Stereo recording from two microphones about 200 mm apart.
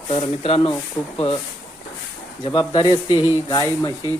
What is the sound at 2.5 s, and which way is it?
Speech, 20° left (ahead or behind).